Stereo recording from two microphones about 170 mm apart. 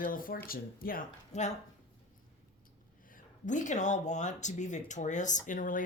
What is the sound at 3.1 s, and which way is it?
Speech, 50° left (ahead or behind).